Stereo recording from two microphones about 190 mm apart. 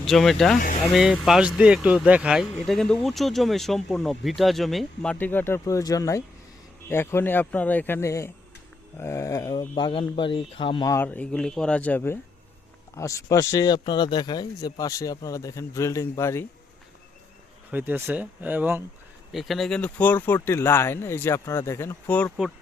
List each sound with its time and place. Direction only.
0.0 s speech: centre (ahead or behind)
17.7 s speech: 10° right (ahead or behind)